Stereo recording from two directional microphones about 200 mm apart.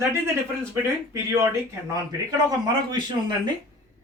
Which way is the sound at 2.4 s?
20° right (ahead or behind).